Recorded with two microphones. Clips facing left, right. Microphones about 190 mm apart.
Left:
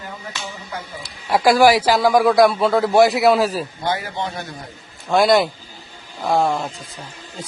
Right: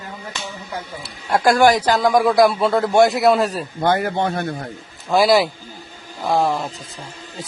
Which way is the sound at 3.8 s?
55° right (ahead or behind).